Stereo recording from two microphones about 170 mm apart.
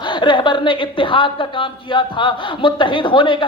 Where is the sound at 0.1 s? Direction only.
25° left (ahead or behind).